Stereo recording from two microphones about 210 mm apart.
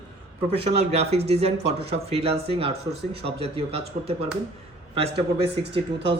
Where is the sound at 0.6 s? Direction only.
30° right (ahead or behind).